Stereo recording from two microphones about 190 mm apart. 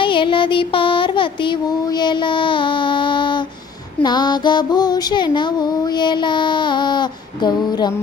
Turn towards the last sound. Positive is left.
turn(degrees=20)  # may be behind; listen again after turning